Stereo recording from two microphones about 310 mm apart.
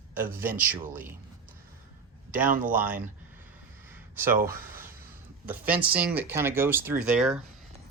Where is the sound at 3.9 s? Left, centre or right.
Centre.